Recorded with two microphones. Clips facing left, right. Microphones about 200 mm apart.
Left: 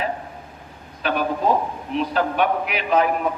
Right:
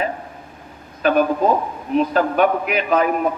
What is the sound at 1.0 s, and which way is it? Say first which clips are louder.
A man's voice: right 5 dB; 45° right (ahead or behind).